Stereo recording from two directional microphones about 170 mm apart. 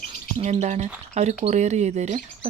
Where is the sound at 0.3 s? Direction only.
35° right (ahead or behind).